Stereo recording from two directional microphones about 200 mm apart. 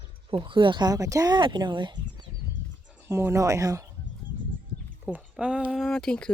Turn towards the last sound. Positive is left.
turn(degrees=5)  # may be behind; listen again after turning